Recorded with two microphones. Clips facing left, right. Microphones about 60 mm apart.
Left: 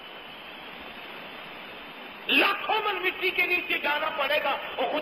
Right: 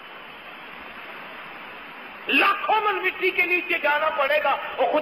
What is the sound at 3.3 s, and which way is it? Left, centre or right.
Speech, right.